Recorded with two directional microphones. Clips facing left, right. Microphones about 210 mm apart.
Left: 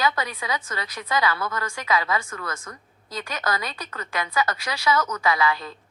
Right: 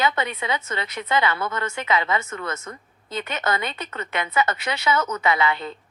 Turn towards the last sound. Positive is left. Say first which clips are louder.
# right 1 dB
turn(degrees=-25)  # may be behind; listen again after turning